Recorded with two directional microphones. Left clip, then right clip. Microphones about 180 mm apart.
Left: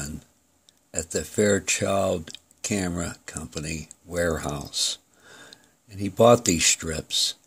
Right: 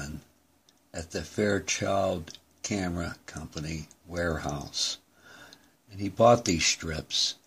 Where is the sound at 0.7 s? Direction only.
40° left (ahead or behind).